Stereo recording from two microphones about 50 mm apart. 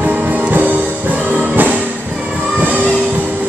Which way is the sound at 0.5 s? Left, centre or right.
Right.